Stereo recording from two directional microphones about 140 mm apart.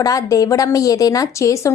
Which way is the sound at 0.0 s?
25° left (ahead or behind).